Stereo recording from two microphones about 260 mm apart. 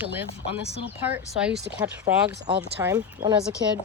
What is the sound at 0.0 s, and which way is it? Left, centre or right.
Speech, centre.